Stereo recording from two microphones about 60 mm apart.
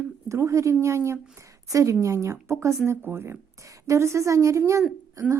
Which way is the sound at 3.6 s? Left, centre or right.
Right.